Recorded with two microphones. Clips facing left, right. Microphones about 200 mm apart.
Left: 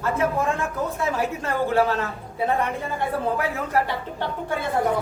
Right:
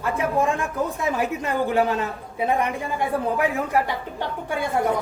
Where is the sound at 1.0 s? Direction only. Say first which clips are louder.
Left 1 dB; 15° right (ahead or behind).